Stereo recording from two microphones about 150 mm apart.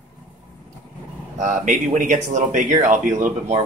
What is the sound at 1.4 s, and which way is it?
Speech, 55° right (ahead or behind).